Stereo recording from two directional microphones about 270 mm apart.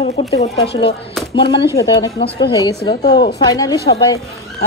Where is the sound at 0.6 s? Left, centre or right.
Left.